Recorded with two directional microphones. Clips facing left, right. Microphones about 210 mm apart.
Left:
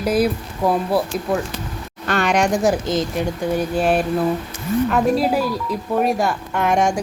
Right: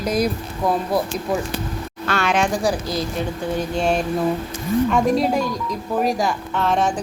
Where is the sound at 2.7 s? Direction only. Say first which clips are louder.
Left 4 dB; 20° left (ahead or behind).